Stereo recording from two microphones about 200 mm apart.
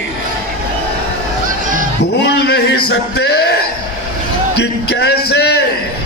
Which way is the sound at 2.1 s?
55° left (ahead or behind).